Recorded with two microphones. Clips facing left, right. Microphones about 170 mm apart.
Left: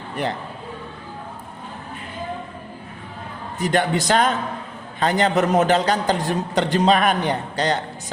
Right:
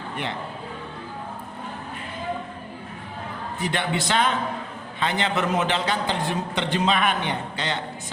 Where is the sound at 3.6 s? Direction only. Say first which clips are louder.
Left 6 dB; 45° left (ahead or behind).